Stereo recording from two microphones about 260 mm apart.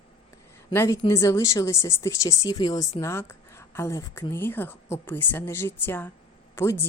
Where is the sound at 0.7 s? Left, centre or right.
Centre.